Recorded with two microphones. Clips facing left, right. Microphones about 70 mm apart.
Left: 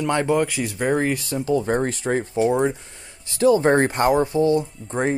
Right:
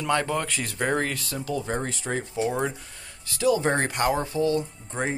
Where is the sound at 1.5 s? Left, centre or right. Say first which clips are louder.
Left 8 dB; left.